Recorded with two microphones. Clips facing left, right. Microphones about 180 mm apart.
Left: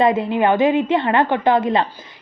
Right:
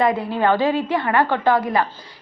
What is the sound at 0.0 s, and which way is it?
A woman's voice, 20° left (ahead or behind).